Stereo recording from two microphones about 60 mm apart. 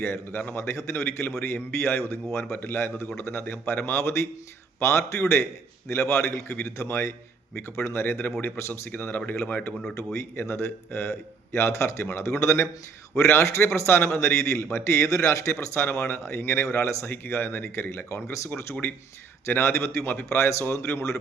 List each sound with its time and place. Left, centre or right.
0.0 s speech: left
0.5 s a man's voice: left
8.9 s speech: left
10.3 s a man's voice: left
19.5 s a man's voice: left